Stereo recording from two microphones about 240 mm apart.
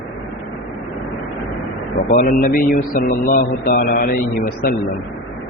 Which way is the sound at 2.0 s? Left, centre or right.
Left.